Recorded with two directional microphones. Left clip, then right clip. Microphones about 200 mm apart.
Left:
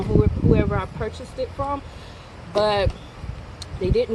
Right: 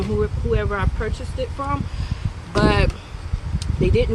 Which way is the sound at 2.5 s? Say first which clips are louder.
Even; 25° right (ahead or behind).